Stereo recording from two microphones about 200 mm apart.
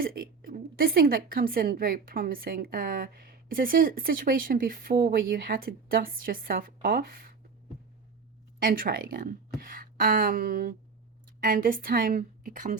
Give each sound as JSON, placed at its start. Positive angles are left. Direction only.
{"t": 0.0, "sound": "a woman's voice", "side_deg": -45}
{"t": 8.5, "sound": "speech", "side_deg": -45}
{"t": 9.6, "sound": "a sound", "side_deg": -45}
{"t": 11.4, "sound": "speech", "side_deg": -45}